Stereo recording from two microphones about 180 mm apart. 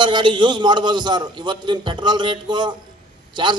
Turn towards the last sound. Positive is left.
turn(degrees=-25)  # may be behind; listen again after turning